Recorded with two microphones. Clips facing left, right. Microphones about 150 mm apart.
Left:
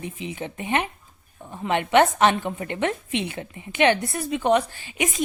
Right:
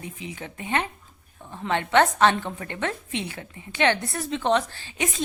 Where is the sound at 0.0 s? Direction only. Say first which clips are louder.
Left 5 dB; 20° left (ahead or behind).